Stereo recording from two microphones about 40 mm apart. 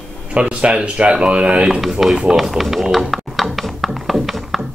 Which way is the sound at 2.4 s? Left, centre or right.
Centre.